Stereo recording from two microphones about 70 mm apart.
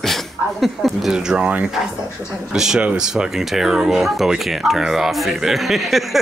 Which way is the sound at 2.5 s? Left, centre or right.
Centre.